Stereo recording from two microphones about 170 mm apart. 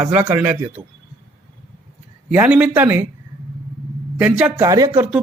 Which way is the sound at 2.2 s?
10° right (ahead or behind).